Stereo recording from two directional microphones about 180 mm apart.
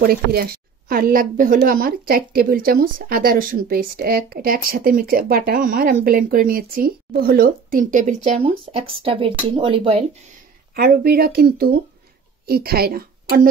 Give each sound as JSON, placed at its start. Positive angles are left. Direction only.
{"t": 0.0, "sound": "a woman's voice", "side_deg": -55}
{"t": 8.4, "sound": "speech", "side_deg": -30}
{"t": 10.7, "sound": "a woman's voice", "side_deg": -55}